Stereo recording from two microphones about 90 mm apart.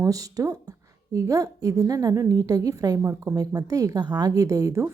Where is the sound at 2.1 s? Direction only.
30° right (ahead or behind).